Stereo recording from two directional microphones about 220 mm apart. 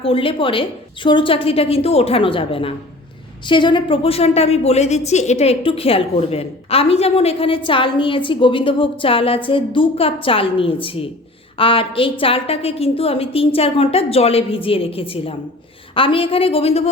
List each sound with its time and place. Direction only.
0.0 s a woman's voice: 25° left (ahead or behind)